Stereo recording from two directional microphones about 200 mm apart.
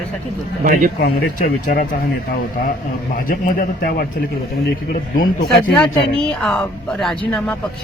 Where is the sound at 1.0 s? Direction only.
45° left (ahead or behind).